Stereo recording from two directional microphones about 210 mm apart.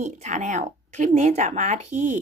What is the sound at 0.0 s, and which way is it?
Speech, 35° right (ahead or behind).